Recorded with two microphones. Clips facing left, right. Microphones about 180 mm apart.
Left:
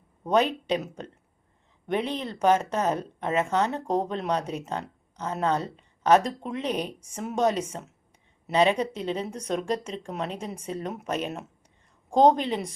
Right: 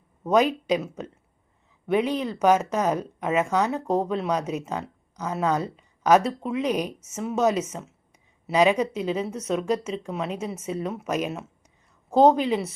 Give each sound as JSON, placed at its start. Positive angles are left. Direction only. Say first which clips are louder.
{"t": 0.3, "sound": "speech", "louder": "right 3 dB", "side_deg": -10}
{"t": 1.9, "sound": "speech", "louder": "right 5 dB", "side_deg": -10}
{"t": 10.7, "sound": "speech", "louder": "right 3 dB", "side_deg": 35}
{"t": 10.9, "sound": "speech", "louder": "right 3 dB", "side_deg": -10}